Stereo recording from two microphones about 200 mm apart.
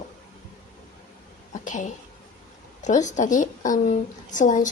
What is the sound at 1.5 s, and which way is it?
A woman's voice, 40° left (ahead or behind).